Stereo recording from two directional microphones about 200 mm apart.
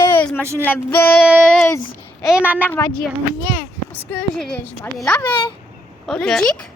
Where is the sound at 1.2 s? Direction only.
5° left (ahead or behind).